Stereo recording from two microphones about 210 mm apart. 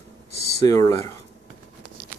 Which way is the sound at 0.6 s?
15° left (ahead or behind).